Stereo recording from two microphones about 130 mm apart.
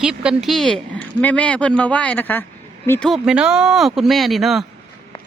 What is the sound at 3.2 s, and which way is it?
Speech, 5° right (ahead or behind).